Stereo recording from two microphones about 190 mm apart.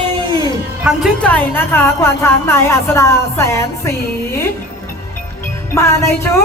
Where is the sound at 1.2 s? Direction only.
10° left (ahead or behind).